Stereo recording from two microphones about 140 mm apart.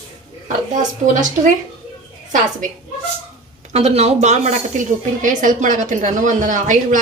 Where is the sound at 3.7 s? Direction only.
50° right (ahead or behind).